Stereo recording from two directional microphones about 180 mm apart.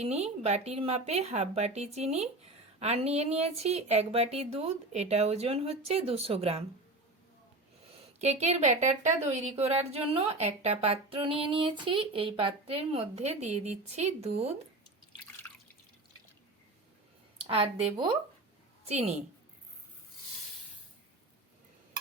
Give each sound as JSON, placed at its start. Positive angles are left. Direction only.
{"t": 0.0, "sound": "a woman's voice", "side_deg": -35}
{"t": 8.2, "sound": "a woman's voice", "side_deg": -40}
{"t": 15.4, "sound": "drip", "side_deg": 10}
{"t": 17.4, "sound": "a woman's voice", "side_deg": -30}